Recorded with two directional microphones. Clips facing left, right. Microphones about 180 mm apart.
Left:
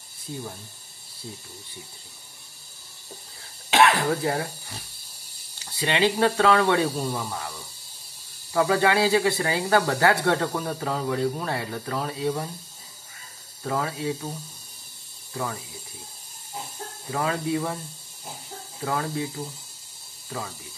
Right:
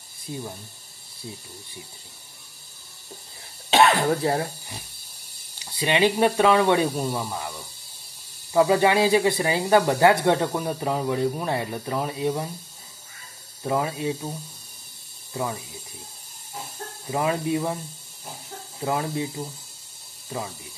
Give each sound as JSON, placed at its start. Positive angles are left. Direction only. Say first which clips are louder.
{"t": 3.7, "sound": "speech", "louder": "right 1 dB", "side_deg": -25}
{"t": 5.6, "sound": "speech", "louder": "right 2 dB", "side_deg": -15}
{"t": 8.5, "sound": "speech", "louder": "right 3 dB", "side_deg": -20}
{"t": 13.6, "sound": "speech", "louder": "right 3 dB", "side_deg": -20}
{"t": 17.1, "sound": "speech", "louder": "right 2 dB", "side_deg": -20}
{"t": 18.9, "sound": "speech", "louder": "right 2 dB", "side_deg": -20}